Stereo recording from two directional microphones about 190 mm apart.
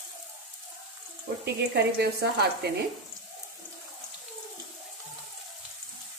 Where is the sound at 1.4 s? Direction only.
55° right (ahead or behind).